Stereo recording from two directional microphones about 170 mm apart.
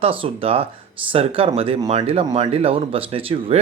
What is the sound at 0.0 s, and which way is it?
Speech, 35° right (ahead or behind).